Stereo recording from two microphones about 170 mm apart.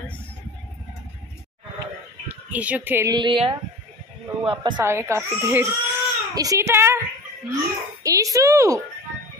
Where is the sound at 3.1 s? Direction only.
30° right (ahead or behind).